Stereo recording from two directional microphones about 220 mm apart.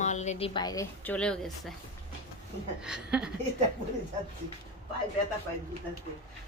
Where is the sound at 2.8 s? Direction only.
5° right (ahead or behind).